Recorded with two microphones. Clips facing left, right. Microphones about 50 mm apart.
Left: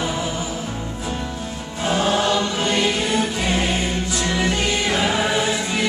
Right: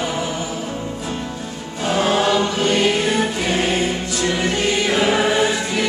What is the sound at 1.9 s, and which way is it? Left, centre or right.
Choir, centre.